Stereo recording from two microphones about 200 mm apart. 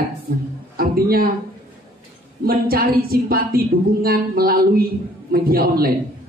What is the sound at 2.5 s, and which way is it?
Speech, 50° right (ahead or behind).